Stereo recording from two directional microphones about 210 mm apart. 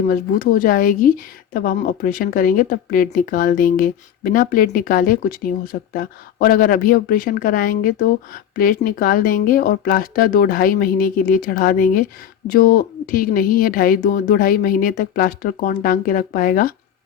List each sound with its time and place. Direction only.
0.1 s speech: 45° left (ahead or behind)